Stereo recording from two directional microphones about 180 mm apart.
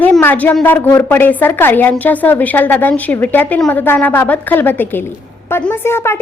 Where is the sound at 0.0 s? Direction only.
10° left (ahead or behind).